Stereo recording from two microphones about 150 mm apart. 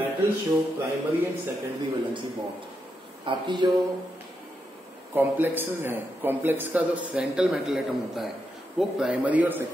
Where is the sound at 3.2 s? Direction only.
30° right (ahead or behind).